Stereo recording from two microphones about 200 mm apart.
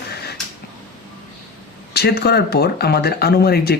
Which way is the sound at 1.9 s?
55° left (ahead or behind).